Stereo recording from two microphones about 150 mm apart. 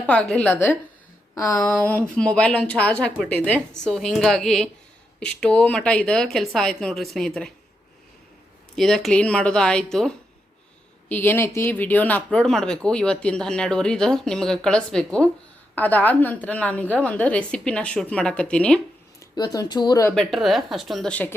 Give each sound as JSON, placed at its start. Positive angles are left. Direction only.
{"t": 0.0, "sound": "speech", "side_deg": 10}
{"t": 8.7, "sound": "speech", "side_deg": 5}
{"t": 19.2, "sound": "speech", "side_deg": 25}
{"t": 20.1, "sound": "speech", "side_deg": 0}